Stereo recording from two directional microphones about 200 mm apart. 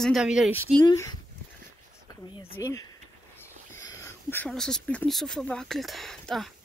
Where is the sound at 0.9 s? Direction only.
20° left (ahead or behind).